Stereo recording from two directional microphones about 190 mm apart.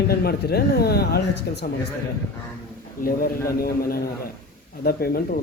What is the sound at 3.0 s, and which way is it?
Mantra, 50° left (ahead or behind).